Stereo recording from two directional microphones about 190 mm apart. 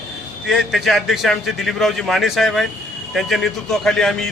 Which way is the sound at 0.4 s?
Centre (ahead or behind).